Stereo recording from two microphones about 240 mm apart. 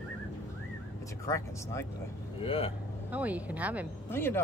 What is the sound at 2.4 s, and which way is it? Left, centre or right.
Speech, left.